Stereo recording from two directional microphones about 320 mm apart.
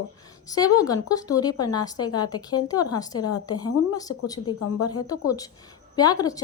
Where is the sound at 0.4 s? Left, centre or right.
Centre.